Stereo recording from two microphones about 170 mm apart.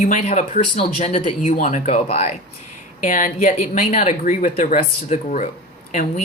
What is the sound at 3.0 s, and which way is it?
Speech, 50° left (ahead or behind).